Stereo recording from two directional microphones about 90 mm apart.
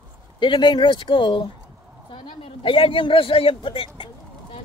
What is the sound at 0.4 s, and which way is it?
A man's voice, 60° left (ahead or behind).